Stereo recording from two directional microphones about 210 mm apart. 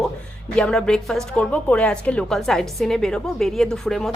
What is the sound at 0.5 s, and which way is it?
A woman's voice, 5° left (ahead or behind).